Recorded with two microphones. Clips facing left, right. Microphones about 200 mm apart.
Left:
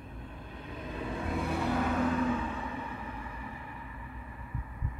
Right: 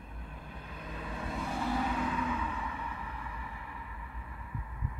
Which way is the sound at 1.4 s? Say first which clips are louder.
Left 2 dB; 60° left (ahead or behind).